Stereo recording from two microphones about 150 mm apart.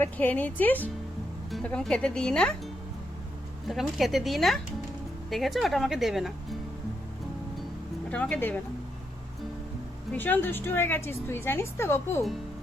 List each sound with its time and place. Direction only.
0.0 s a woman's voice: 10° left (ahead or behind)
3.7 s speech: centre (ahead or behind)
8.1 s a woman's voice: 10° left (ahead or behind)
10.1 s a woman's voice: 10° left (ahead or behind)